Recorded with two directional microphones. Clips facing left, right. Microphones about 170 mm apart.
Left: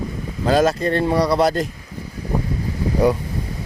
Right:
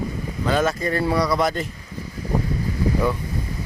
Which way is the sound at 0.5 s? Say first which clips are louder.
Left 5 dB; 30° left (ahead or behind).